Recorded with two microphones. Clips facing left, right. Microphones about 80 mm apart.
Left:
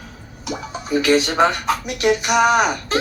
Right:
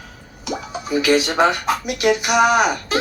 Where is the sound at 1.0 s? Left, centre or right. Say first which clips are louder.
Even; centre.